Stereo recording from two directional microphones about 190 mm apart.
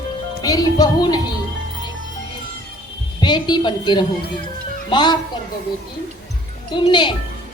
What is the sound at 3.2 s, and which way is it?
A woman's voice, 25° left (ahead or behind).